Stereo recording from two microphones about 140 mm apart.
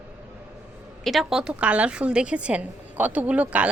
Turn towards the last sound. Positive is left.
turn(degrees=-10)  # may be behind; listen again after turning